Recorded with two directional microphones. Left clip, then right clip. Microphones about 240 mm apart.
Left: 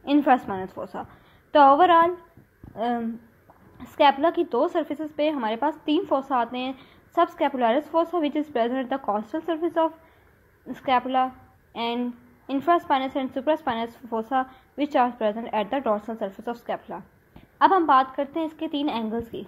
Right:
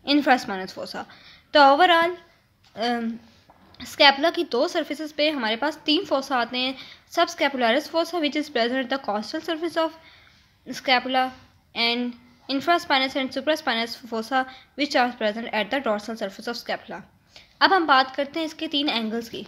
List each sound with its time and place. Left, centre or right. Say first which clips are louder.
0.0 s a woman's voice: even; right